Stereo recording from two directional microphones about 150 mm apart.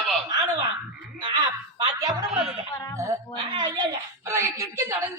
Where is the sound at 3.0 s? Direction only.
25° right (ahead or behind).